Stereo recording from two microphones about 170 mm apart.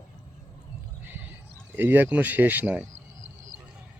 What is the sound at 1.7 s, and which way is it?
Speech, 10° right (ahead or behind).